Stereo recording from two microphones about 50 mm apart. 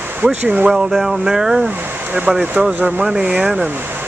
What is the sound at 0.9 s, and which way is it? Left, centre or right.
Speech, centre.